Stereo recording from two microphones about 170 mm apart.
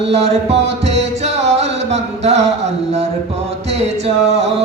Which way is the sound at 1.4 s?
40° right (ahead or behind).